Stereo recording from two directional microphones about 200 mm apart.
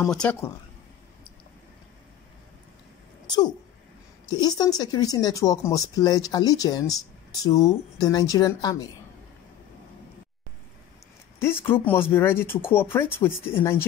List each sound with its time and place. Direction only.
0.0 s speech: 5° left (ahead or behind)
3.3 s speech: 20° left (ahead or behind)
11.3 s speech: 10° left (ahead or behind)